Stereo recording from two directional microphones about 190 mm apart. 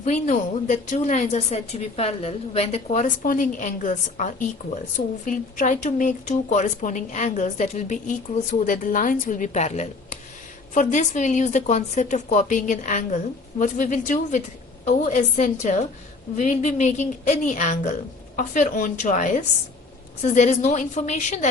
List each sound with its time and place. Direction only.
0.0 s a woman's voice: 40° left (ahead or behind)